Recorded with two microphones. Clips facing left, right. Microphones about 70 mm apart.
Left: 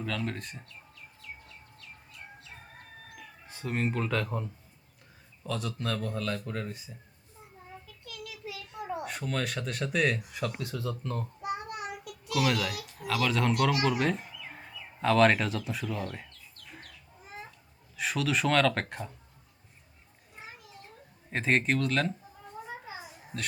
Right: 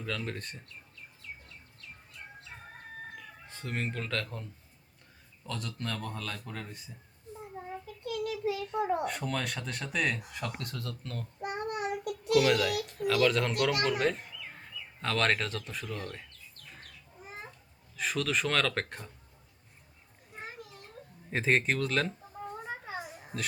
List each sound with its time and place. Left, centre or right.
0.0 s speech: centre
3.2 s speech: centre
5.5 s speech: centre
8.0 s child singing: right
8.7 s speech: centre
11.4 s child singing: right
12.3 s speech: centre
17.9 s speech: centre
21.2 s speech: centre
22.6 s a sound: right
23.3 s speech: centre